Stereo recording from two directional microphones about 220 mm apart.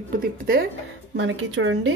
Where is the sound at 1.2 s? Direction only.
60° right (ahead or behind).